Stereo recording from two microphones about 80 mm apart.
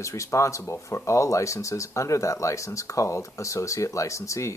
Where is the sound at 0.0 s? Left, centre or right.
Left.